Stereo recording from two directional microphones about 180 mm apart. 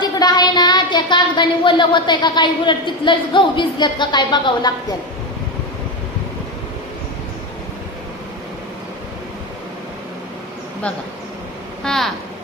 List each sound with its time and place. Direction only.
0.0 s speech: 20° left (ahead or behind)
11.8 s speech: centre (ahead or behind)